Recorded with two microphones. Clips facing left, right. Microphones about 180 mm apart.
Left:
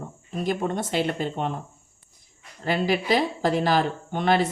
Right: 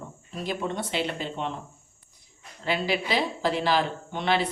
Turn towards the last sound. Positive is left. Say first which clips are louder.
# left 4 dB
turn(degrees=45)  # may be behind; listen again after turning